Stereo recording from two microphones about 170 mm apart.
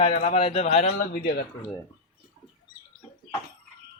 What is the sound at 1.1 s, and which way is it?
Speech, 65° left (ahead or behind).